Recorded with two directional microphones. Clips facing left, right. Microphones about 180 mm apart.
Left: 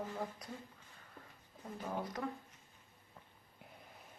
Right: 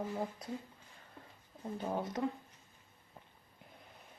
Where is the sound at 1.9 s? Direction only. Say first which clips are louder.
Right 4 dB; 25° right (ahead or behind).